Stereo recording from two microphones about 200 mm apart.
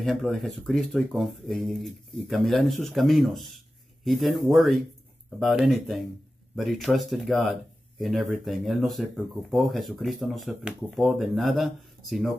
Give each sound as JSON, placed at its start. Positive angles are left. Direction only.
{"t": 0.0, "sound": "speech", "side_deg": 0}